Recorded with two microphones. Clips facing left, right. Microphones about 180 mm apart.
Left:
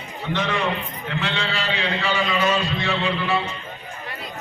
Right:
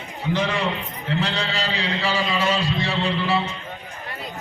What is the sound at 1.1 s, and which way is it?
A man's voice, 40° right (ahead or behind).